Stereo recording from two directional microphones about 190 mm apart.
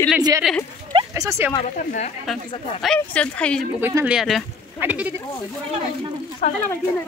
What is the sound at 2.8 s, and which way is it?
Speech, 5° left (ahead or behind).